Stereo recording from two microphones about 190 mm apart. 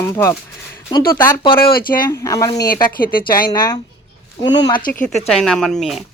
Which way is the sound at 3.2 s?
50° left (ahead or behind).